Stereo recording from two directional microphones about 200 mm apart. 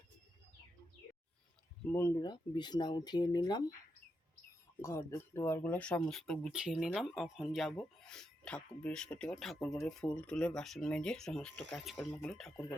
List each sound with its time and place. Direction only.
1.9 s speech: 15° left (ahead or behind)
4.8 s speech: 15° left (ahead or behind)